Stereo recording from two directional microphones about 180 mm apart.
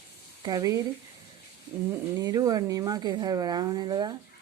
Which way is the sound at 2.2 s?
20° right (ahead or behind).